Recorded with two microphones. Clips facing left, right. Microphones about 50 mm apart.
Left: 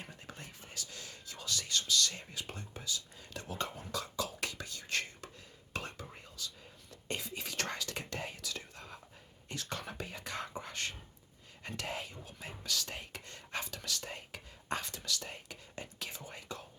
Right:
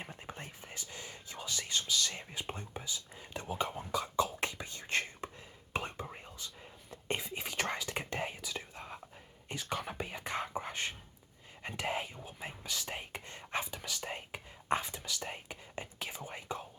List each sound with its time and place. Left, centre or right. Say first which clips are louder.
0.0 s whispering: right 3 dB; right